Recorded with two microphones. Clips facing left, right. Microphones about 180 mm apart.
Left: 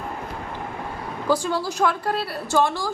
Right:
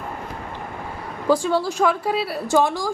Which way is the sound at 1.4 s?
Centre (ahead or behind).